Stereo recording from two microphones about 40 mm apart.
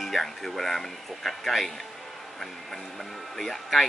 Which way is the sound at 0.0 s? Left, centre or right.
Centre.